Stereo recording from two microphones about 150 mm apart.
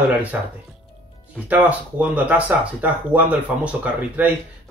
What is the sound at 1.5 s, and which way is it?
Speech, 10° right (ahead or behind).